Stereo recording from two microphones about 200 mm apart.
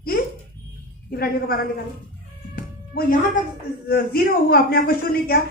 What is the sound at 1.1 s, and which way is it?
Speech, 50° left (ahead or behind).